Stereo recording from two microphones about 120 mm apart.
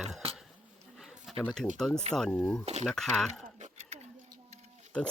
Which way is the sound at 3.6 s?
65° right (ahead or behind).